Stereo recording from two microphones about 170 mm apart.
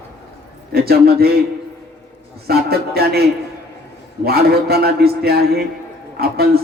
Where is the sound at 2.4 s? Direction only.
65° right (ahead or behind).